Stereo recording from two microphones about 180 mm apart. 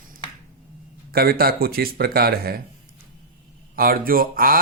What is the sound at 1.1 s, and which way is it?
Speech, 55° right (ahead or behind).